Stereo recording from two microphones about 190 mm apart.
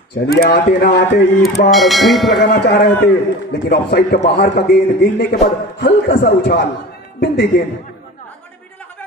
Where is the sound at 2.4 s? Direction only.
60° left (ahead or behind).